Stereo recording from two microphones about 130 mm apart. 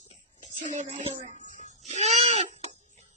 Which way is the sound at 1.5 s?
60° right (ahead or behind).